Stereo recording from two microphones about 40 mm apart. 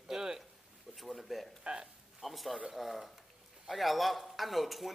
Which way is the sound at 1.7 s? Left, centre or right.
Right.